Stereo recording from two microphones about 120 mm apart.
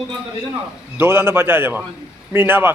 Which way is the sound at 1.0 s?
20° right (ahead or behind).